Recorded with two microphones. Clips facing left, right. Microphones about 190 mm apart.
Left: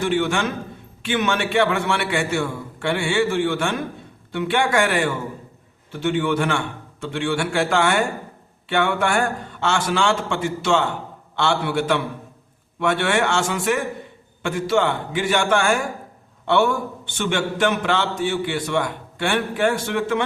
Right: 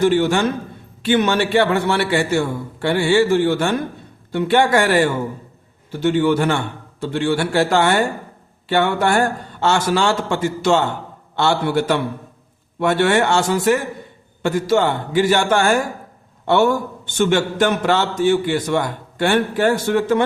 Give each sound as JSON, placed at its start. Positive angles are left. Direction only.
{"t": 0.0, "sound": "a man's voice", "side_deg": -40}